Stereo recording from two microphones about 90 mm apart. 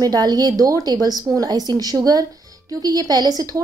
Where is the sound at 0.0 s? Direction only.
45° right (ahead or behind).